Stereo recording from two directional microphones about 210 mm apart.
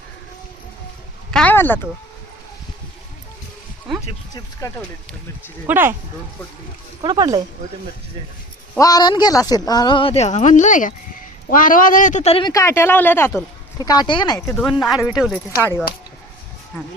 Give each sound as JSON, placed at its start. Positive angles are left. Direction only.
{"t": 1.3, "sound": "a sound", "side_deg": 5}
{"t": 4.6, "sound": "speech", "side_deg": 15}
{"t": 5.6, "sound": "speech", "side_deg": -10}
{"t": 7.0, "sound": "speech", "side_deg": -20}
{"t": 8.8, "sound": "a man's voice", "side_deg": 20}
{"t": 14.3, "sound": "speech", "side_deg": 5}